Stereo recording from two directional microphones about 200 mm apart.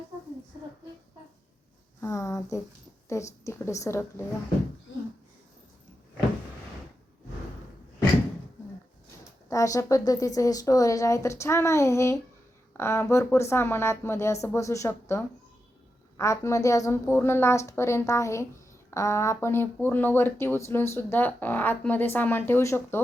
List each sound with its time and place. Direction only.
2.0 s speech: 15° left (ahead or behind)
9.5 s speech: 15° left (ahead or behind)